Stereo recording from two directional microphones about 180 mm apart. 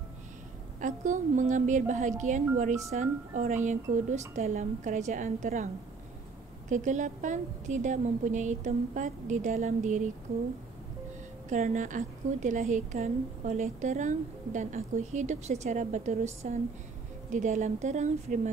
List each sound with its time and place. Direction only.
0.7 s a woman's voice: 45° right (ahead or behind)
6.7 s a woman's voice: 45° right (ahead or behind)
11.4 s a woman's voice: 40° right (ahead or behind)